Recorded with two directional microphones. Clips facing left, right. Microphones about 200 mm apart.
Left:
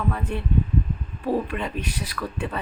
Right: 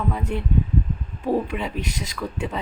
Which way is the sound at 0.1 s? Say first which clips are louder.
Right 1 dB; 15° right (ahead or behind).